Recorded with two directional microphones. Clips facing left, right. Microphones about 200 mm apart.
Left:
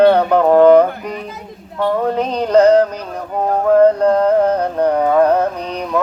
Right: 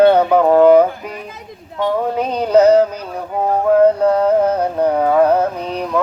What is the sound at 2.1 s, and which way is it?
Music, 5° right (ahead or behind).